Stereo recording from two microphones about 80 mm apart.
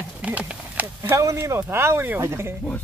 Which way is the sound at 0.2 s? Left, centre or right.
Centre.